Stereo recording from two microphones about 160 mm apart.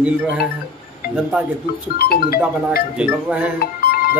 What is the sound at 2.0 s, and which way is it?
Speech, 75° left (ahead or behind).